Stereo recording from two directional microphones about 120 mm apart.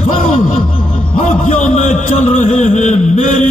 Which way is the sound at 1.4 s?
90° left.